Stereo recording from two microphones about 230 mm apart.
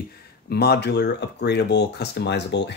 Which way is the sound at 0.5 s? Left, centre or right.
Left.